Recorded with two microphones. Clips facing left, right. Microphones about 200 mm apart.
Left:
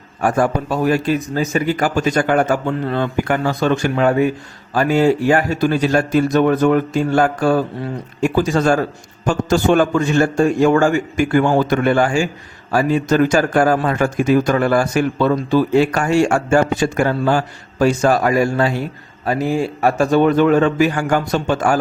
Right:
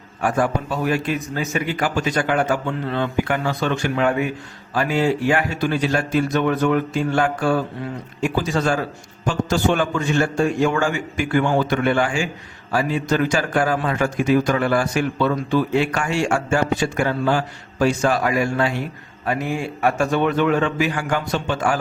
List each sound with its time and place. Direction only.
0.2 s a man's voice: 45° left (ahead or behind)